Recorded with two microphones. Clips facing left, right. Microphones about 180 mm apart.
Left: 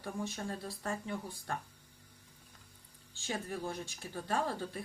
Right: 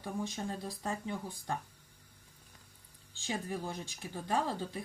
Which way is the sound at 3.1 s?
15° right (ahead or behind).